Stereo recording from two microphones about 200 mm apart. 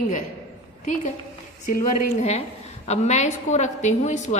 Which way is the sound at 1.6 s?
40° left (ahead or behind).